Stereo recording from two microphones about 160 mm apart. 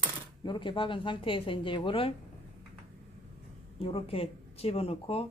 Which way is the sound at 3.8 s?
35° left (ahead or behind).